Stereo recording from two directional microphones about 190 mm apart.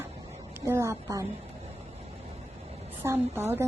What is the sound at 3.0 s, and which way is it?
Speech, 10° right (ahead or behind).